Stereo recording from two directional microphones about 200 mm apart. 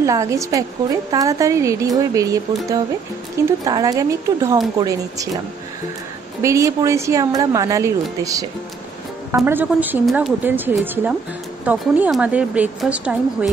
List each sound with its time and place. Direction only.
0.0 s a woman's voice: 15° right (ahead or behind)
6.4 s a woman's voice: 15° right (ahead or behind)